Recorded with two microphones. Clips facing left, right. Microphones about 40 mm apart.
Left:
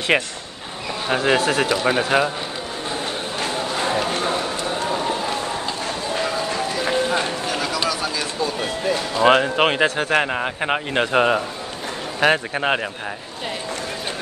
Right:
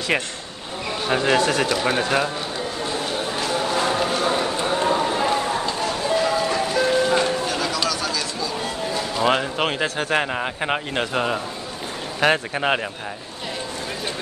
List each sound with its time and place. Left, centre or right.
0.1 s speech: centre
3.3 s a sound: left
4.4 s a sound: right
6.2 s music: centre
7.2 s a sound: centre
9.1 s speech: left
9.9 s speech: centre
11.1 s speech: left
12.2 s speech: centre